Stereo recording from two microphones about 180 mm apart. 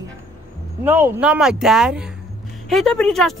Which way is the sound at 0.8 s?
10° right (ahead or behind).